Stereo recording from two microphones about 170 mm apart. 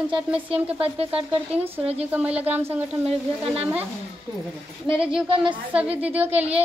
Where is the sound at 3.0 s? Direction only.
35° right (ahead or behind).